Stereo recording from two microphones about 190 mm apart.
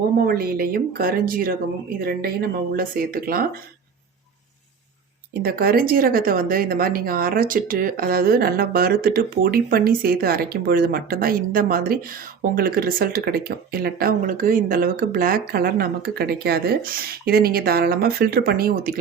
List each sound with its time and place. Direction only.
0.3 s speech: 50° right (ahead or behind)
5.3 s speech: 55° right (ahead or behind)